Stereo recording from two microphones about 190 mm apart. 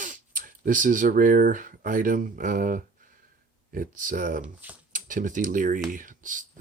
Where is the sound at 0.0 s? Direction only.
45° right (ahead or behind).